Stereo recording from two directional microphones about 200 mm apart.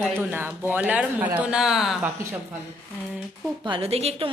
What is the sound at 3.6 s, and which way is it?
Speech, 25° right (ahead or behind).